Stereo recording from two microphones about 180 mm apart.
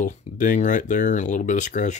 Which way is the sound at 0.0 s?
45° left (ahead or behind).